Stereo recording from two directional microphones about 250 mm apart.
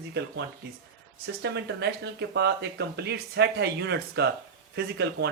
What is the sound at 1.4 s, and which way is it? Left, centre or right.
Speech, right.